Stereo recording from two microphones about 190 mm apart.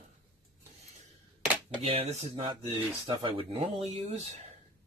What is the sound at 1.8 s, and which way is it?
Speech, 35° right (ahead or behind).